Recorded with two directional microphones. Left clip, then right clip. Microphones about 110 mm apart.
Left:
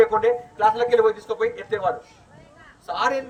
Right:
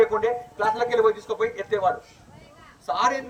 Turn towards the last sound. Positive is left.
turn(degrees=-15)  # may be behind; listen again after turning